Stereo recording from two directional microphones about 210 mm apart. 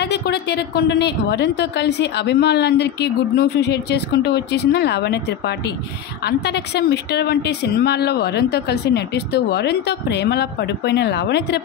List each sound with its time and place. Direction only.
0.0 s a woman's voice: 50° left (ahead or behind)